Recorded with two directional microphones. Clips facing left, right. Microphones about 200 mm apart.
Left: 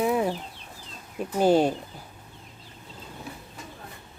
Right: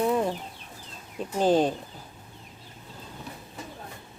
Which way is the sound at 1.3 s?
10° left (ahead or behind).